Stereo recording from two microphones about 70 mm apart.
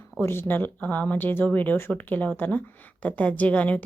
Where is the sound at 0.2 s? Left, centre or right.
Left.